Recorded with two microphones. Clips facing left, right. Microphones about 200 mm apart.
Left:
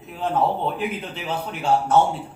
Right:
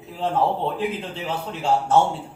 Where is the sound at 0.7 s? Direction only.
25° right (ahead or behind).